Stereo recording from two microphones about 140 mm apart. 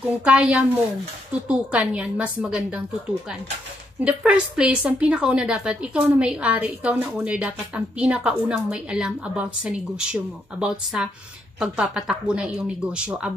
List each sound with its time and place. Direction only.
0.2 s a woman's voice: 5° right (ahead or behind)
4.0 s a woman's voice: 10° right (ahead or behind)